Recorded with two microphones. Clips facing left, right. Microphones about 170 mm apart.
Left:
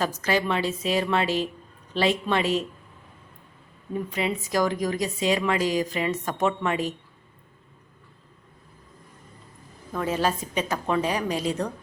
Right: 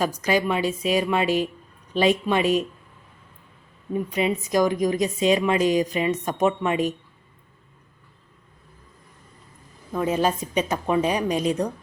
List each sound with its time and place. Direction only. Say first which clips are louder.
0.0 s a woman's voice: right 3 dB; 15° right (ahead or behind)
3.9 s a woman's voice: right 4 dB; 20° right (ahead or behind)
9.9 s a woman's voice: right 3 dB; 15° right (ahead or behind)